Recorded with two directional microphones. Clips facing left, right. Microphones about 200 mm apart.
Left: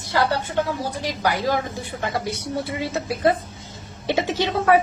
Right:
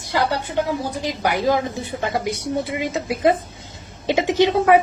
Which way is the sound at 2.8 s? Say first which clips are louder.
Right 1 dB; 15° right (ahead or behind).